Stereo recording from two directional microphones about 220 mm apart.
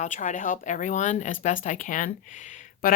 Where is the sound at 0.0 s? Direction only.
35° left (ahead or behind).